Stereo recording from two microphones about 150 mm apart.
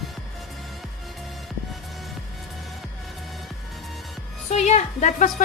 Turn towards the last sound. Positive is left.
turn(degrees=55)  # may be behind; listen again after turning